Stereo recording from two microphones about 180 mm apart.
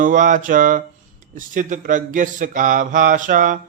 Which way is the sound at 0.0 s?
45° right (ahead or behind).